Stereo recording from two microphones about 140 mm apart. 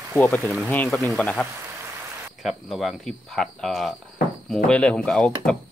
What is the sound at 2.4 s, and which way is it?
Speech, centre (ahead or behind).